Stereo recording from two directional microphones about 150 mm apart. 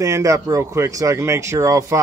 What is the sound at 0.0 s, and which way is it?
Speech, 20° right (ahead or behind).